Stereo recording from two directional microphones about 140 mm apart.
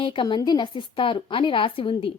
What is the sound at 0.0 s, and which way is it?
A woman's voice, 35° left (ahead or behind).